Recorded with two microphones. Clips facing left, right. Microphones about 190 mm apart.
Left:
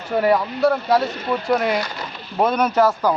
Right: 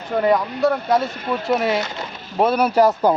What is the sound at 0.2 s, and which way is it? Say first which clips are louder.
Speech: even; 5° left (ahead or behind).